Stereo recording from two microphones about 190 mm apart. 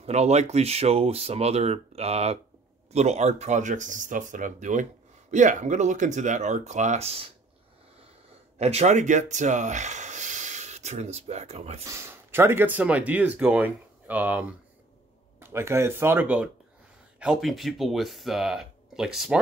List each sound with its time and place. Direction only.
0.0 s speech: 35° right (ahead or behind)
8.5 s speech: 35° right (ahead or behind)
11.8 s speech: 15° right (ahead or behind)